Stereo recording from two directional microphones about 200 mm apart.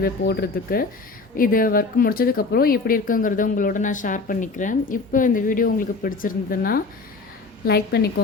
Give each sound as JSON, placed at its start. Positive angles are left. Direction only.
{"t": 0.0, "sound": "a woman's voice", "side_deg": 50}